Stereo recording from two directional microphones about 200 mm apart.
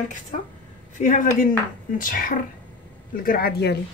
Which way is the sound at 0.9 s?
40° left (ahead or behind).